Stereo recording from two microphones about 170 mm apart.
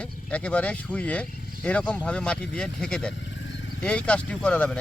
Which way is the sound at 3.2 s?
90° left.